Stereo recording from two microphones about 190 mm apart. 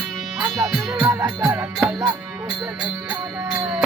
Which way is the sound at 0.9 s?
15° right (ahead or behind).